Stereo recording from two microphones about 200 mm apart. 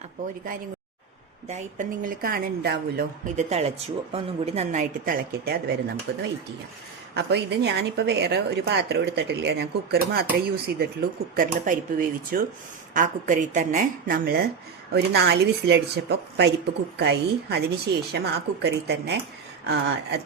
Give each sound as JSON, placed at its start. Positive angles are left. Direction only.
{"t": 1.5, "sound": "speech", "side_deg": -35}
{"t": 3.3, "sound": "a woman's voice", "side_deg": -30}
{"t": 6.1, "sound": "a woman's voice", "side_deg": -60}